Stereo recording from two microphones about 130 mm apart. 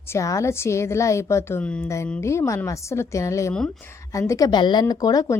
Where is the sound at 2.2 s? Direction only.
20° left (ahead or behind).